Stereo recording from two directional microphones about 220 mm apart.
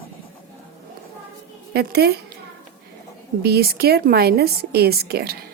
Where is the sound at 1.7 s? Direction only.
45° right (ahead or behind).